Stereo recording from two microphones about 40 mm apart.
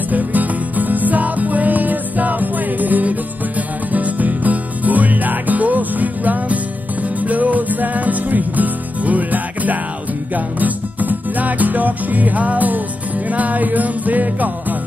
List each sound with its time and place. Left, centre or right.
0.1 s music: right